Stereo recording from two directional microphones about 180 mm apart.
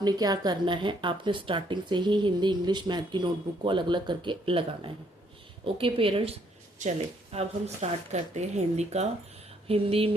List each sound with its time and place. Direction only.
0.0 s speech: 20° right (ahead or behind)
7.3 s speech: 40° right (ahead or behind)